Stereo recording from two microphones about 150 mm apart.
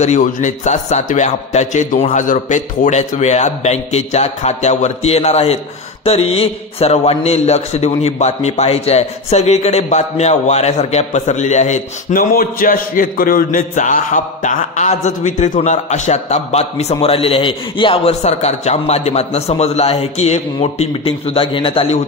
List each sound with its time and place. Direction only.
0.0 s a man's voice: 55° left (ahead or behind)